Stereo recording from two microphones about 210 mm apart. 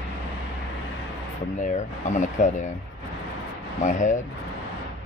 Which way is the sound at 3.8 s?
35° left (ahead or behind).